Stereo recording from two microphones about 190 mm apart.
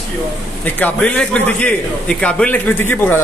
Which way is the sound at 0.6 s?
10° left (ahead or behind).